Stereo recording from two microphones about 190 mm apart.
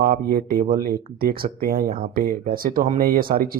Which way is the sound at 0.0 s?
50° right (ahead or behind).